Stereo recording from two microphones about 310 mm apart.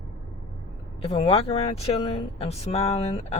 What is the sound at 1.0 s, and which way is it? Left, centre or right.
Speech, centre.